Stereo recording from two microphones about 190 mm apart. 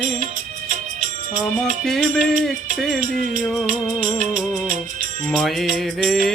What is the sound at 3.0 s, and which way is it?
Music, 45° right (ahead or behind).